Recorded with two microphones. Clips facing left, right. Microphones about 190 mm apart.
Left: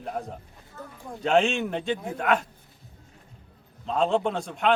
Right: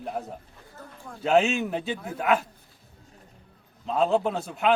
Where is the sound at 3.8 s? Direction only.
5° right (ahead or behind).